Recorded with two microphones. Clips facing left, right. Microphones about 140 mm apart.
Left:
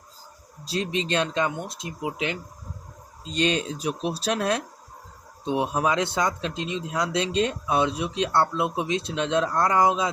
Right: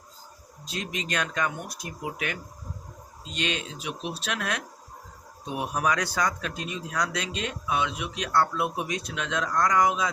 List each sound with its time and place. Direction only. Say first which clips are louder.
0.6 s speech: left 7 dB; 35° left (ahead or behind)
3.2 s speech: left 7 dB; 35° left (ahead or behind)